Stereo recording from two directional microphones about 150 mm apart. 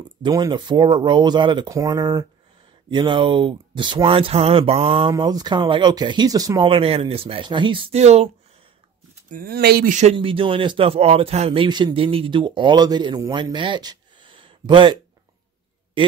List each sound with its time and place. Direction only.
0.2 s speech: 30° right (ahead or behind)
6.7 s speech: 40° right (ahead or behind)
8.0 s speech: 45° right (ahead or behind)
9.3 s speech: 80° right
10.1 s speech: 35° right (ahead or behind)